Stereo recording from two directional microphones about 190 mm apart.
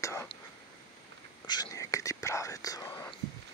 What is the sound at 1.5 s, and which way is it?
Speech, 20° left (ahead or behind).